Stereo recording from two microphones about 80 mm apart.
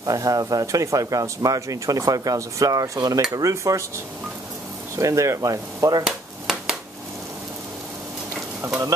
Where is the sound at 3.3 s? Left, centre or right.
Right.